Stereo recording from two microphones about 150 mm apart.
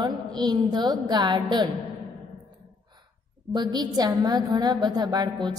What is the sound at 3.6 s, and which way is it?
A woman's voice, 30° right (ahead or behind).